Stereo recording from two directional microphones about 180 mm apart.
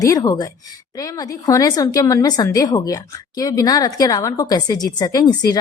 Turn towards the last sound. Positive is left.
turn(degrees=20)  # may be behind; listen again after turning